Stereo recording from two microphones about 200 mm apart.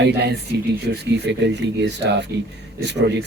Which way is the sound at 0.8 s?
60° right (ahead or behind).